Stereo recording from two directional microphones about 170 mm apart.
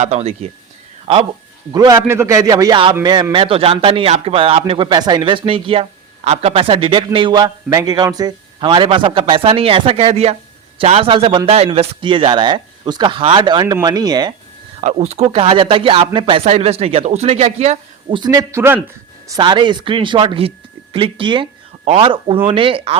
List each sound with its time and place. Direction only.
0.0 s a man's voice: 40° right (ahead or behind)
1.7 s a man's voice: 20° right (ahead or behind)
14.8 s a man's voice: 40° right (ahead or behind)
18.2 s a man's voice: 20° right (ahead or behind)
19.3 s a man's voice: 25° right (ahead or behind)